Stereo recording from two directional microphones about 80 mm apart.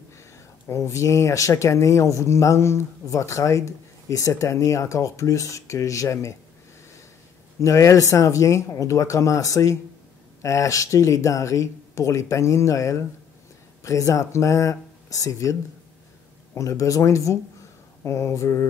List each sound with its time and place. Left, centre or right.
0.7 s speech: left
7.6 s speech: left
16.5 s speech: left